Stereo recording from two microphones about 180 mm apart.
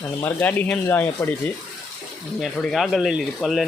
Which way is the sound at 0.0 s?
10° left (ahead or behind).